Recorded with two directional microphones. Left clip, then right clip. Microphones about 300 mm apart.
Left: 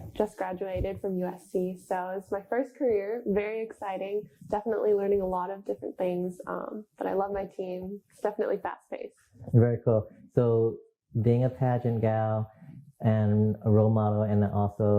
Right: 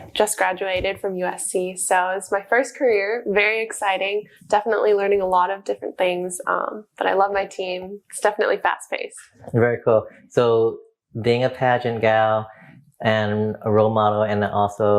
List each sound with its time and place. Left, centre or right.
0.2 s a woman's voice: centre